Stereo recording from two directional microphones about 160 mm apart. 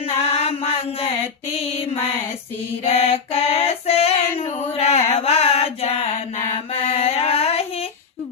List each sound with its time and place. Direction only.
0.0 s mantra: 40° left (ahead or behind)
2.8 s female singing: 40° left (ahead or behind)
7.0 s a sound: 40° left (ahead or behind)